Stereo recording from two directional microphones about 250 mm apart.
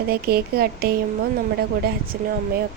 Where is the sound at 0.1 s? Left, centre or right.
Right.